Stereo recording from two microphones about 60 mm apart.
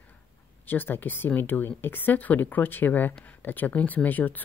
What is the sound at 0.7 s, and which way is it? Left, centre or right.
Speech, left.